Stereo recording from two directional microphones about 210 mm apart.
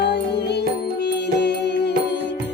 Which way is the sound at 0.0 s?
55° left (ahead or behind).